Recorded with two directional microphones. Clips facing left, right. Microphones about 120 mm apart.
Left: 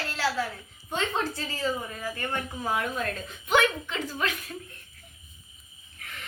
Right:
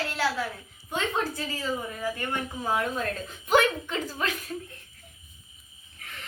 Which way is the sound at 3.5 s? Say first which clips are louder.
Right 2 dB; 35° right (ahead or behind).